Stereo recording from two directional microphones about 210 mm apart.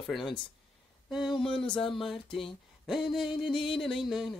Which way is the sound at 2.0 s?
Centre (ahead or behind).